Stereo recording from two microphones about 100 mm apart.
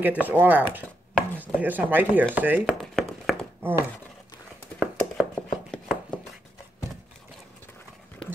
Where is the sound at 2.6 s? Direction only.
Centre (ahead or behind).